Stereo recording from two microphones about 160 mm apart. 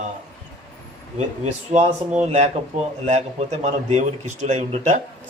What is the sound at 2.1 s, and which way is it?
Speech, 45° right (ahead or behind).